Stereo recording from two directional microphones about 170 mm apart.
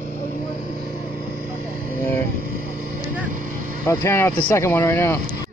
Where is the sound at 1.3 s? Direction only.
60° right (ahead or behind).